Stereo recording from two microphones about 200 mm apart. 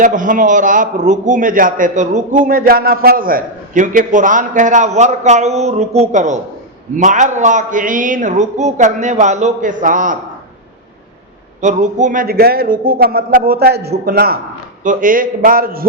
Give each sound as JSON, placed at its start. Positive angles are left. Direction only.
{"t": 0.0, "sound": "a man's voice", "side_deg": -40}
{"t": 11.6, "sound": "speech", "side_deg": -40}